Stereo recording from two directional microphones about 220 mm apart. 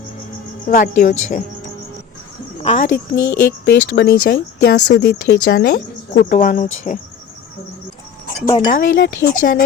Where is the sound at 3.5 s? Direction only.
45° left (ahead or behind).